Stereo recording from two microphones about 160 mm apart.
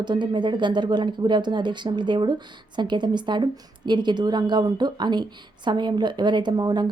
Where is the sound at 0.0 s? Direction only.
30° right (ahead or behind).